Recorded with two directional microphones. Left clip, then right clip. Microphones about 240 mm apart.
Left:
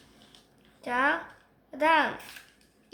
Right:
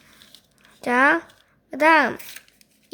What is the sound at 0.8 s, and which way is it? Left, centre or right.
A woman's voice, right.